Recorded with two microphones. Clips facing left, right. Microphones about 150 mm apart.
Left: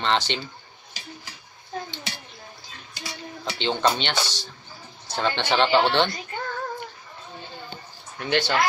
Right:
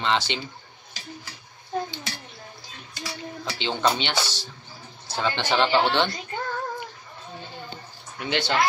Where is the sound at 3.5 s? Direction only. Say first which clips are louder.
Left 1 dB; 5° right (ahead or behind).